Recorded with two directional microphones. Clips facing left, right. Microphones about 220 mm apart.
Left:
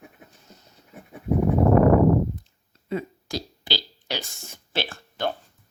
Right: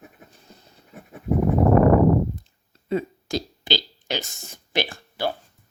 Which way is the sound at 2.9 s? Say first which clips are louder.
Right 4 dB; 25° right (ahead or behind).